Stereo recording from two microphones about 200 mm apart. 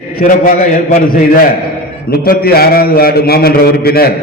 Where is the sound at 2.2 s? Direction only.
50° left (ahead or behind).